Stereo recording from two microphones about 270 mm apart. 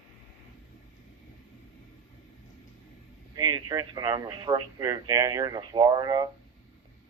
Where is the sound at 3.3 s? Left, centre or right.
Centre.